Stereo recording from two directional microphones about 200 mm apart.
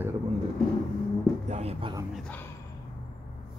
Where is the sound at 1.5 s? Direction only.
30° right (ahead or behind).